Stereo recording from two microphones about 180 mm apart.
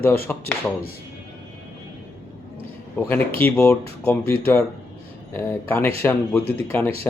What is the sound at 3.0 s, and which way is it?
Speech, 10° left (ahead or behind).